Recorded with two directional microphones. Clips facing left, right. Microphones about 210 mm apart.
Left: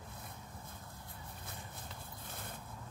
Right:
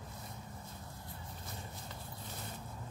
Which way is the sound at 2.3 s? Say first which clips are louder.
Right 1 dB; 55° left (ahead or behind).